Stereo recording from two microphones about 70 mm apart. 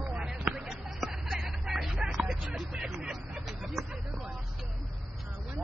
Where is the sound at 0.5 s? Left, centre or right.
Centre.